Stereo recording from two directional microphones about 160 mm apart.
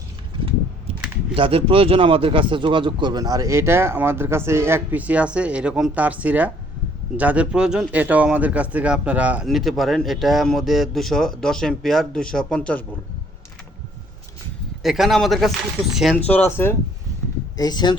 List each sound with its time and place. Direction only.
1.4 s a man's voice: 35° right (ahead or behind); by 12.8 s 5° left (ahead or behind)
14.8 s a man's voice: centre (ahead or behind)
16.1 s speech: 10° left (ahead or behind)
17.6 s speech: 25° left (ahead or behind)